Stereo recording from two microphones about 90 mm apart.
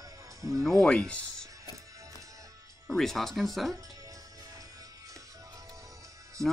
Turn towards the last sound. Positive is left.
turn(degrees=-35)  # may be behind; listen again after turning